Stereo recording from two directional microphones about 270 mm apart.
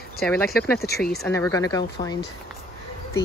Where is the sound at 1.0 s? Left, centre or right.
Centre.